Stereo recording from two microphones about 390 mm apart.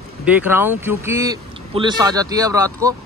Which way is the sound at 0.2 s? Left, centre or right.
Centre.